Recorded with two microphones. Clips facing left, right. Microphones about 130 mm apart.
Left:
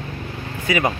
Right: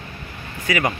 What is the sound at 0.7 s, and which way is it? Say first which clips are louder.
Speech: left 1 dB; 20° left (ahead or behind).